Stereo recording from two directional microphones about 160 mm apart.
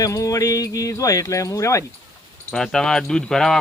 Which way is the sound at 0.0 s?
20° left (ahead or behind).